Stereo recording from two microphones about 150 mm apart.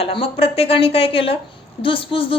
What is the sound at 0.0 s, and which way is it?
A woman's voice, 40° left (ahead or behind).